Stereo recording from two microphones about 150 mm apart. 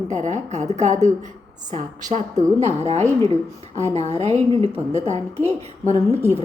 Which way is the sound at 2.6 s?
45° right (ahead or behind).